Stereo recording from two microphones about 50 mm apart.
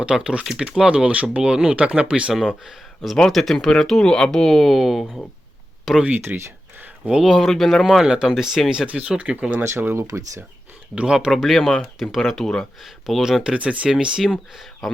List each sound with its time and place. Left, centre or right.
0.0 s speech: centre
2.6 s speech: centre
6.1 s speech: right
7.0 s speech: right
7.4 s speech: centre
8.0 s speech: centre
8.9 s speech: right
9.6 s speech: right
10.9 s speech: centre
11.3 s speech: centre
12.8 s speech: centre
13.4 s speech: centre
14.3 s speech: centre